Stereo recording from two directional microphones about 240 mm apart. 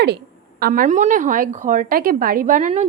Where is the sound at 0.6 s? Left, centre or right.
Right.